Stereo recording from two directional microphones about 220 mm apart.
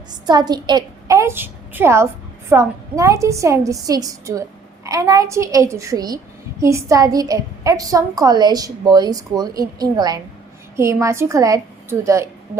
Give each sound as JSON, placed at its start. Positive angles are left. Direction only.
{"t": 0.3, "sound": "a woman's voice", "side_deg": -20}